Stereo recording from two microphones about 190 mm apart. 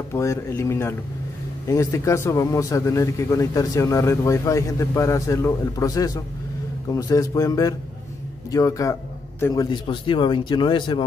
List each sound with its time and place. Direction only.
0.1 s speech: 15° left (ahead or behind)